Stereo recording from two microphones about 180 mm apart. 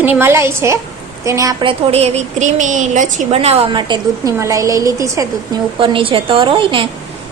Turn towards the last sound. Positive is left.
turn(degrees=-30)  # may be behind; listen again after turning